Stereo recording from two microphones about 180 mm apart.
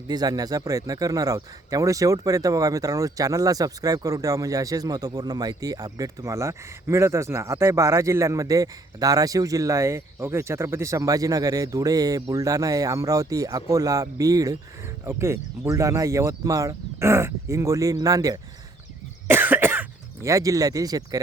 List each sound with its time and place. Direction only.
0.1 s speech: 20° right (ahead or behind)
19.3 s cough: 10° right (ahead or behind)